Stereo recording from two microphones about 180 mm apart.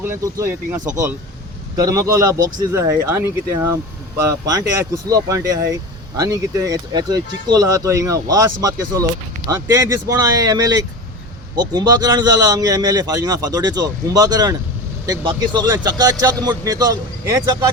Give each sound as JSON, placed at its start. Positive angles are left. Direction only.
{"t": 0.0, "sound": "a man's voice", "side_deg": -15}
{"t": 4.2, "sound": "a man's voice", "side_deg": -15}